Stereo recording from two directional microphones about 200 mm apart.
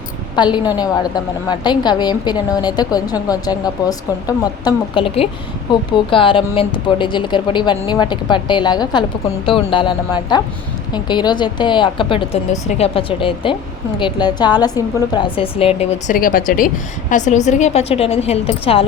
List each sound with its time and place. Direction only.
0.3 s a woman's voice: 20° left (ahead or behind)
16.1 s a woman's voice: 45° left (ahead or behind); by 18.9 s 30° left (ahead or behind)